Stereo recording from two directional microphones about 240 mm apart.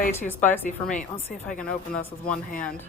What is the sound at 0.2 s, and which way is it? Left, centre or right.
Speech, centre.